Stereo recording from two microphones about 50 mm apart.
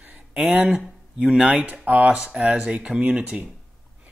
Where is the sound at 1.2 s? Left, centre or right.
Centre.